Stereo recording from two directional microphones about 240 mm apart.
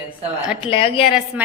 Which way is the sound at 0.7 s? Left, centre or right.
Left.